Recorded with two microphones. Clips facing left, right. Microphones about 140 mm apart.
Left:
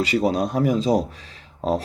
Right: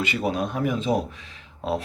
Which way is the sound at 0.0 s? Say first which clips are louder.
Left 5 dB; 35° left (ahead or behind).